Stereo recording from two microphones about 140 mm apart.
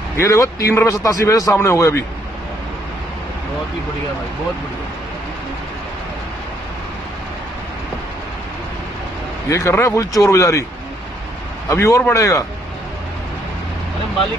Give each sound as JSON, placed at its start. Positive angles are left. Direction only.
{"t": 0.2, "sound": "a man's voice", "side_deg": 25}
{"t": 9.5, "sound": "a man's voice", "side_deg": 20}
{"t": 11.7, "sound": "a man's voice", "side_deg": 20}